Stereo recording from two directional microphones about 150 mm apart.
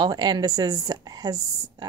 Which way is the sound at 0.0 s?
30° right (ahead or behind).